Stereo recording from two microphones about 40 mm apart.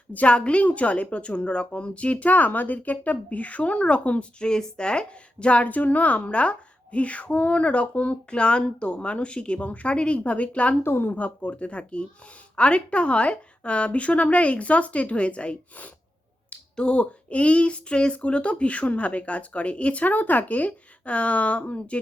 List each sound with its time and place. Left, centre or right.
0.1 s a woman's voice: left
4.4 s a woman's voice: centre
10.8 s speech: left
11.1 s a woman's voice: left